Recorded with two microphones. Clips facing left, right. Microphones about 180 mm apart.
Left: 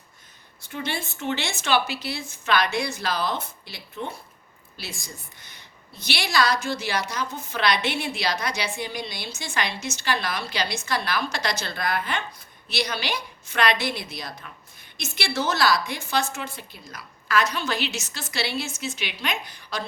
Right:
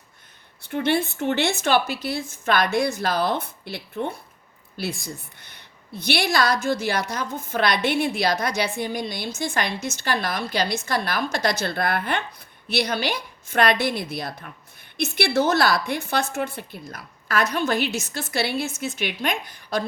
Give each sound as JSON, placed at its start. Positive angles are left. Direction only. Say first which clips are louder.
{"t": 0.6, "sound": "a woman's voice", "louder": "right 9 dB", "side_deg": -60}